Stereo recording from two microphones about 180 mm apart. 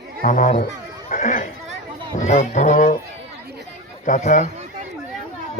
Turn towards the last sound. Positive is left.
turn(degrees=40)  # may be behind; listen again after turning